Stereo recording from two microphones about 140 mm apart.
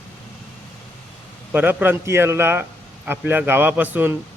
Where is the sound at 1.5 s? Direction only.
15° right (ahead or behind).